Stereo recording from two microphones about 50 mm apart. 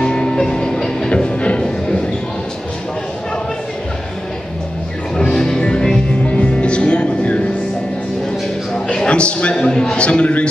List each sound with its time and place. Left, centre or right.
0.0 s music: centre
5.1 s music: centre
6.2 s music: left
8.8 s a sound: centre